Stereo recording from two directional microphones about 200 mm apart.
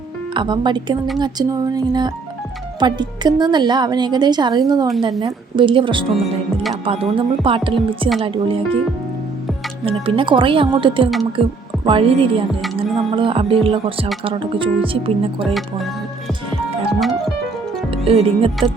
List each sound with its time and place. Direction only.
0.3 s a woman's voice: 20° right (ahead or behind)
6.1 s speech: centre (ahead or behind)
6.8 s a woman's voice: 25° right (ahead or behind)
9.8 s a woman's voice: 25° right (ahead or behind)
16.9 s music: centre (ahead or behind)
17.9 s speech: 30° right (ahead or behind)